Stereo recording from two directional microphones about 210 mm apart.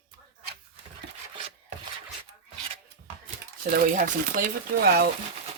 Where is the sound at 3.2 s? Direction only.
45° right (ahead or behind).